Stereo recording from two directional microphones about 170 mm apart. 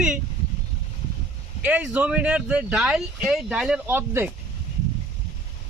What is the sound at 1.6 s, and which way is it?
Speech, 5° right (ahead or behind).